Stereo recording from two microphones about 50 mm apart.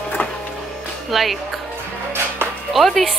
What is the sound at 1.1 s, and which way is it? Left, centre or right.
Speech, centre.